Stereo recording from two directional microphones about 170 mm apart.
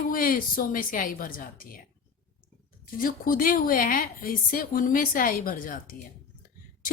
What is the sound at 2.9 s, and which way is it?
A woman's voice, 55° left (ahead or behind).